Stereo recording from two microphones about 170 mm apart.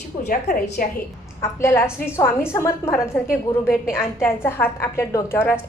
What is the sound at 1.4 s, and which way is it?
A woman's voice, 15° left (ahead or behind).